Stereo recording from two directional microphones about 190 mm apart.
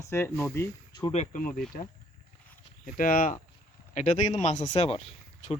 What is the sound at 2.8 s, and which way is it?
Speech, 45° left (ahead or behind).